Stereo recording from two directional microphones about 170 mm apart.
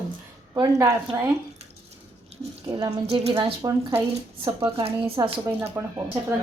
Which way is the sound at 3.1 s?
35° right (ahead or behind).